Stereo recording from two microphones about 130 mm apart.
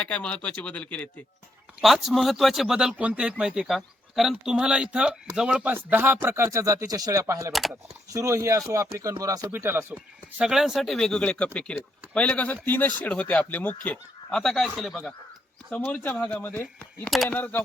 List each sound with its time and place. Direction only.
0.0 s speech: 10° left (ahead or behind)
1.8 s speech: centre (ahead or behind)
10.4 s speech: 5° right (ahead or behind)
16.2 s speech: 15° left (ahead or behind)